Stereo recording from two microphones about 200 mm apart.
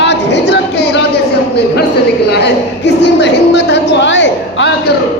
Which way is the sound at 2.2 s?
60° left (ahead or behind).